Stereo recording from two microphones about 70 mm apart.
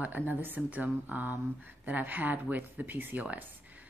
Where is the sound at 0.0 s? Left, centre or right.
Right.